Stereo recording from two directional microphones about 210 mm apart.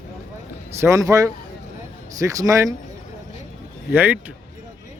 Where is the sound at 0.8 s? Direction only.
15° right (ahead or behind).